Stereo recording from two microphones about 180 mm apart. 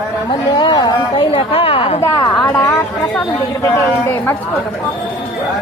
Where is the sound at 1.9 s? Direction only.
10° left (ahead or behind).